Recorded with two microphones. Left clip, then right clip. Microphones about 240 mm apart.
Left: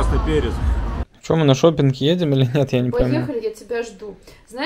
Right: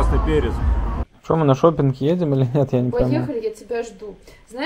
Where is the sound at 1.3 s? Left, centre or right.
Left.